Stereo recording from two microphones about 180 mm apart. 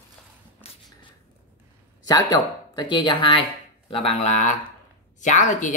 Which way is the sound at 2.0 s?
20° left (ahead or behind).